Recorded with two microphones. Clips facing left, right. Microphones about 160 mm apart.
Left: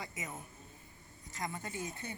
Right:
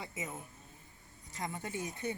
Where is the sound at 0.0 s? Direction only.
30° right (ahead or behind).